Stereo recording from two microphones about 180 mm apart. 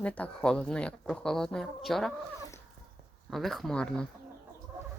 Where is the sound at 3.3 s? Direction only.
Centre (ahead or behind).